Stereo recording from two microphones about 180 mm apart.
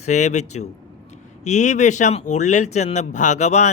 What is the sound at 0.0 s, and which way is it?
Speech, 40° left (ahead or behind).